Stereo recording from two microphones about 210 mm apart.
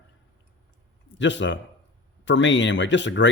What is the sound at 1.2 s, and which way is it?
Speech, 60° left (ahead or behind).